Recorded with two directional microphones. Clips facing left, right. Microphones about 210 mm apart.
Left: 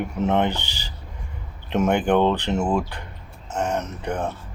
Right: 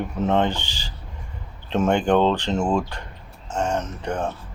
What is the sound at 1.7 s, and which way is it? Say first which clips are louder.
Speech: even; 15° left (ahead or behind).